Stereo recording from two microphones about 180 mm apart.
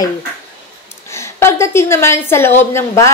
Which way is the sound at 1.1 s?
15° left (ahead or behind).